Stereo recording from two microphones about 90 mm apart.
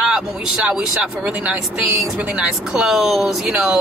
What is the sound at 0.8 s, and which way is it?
Speech, 15° right (ahead or behind).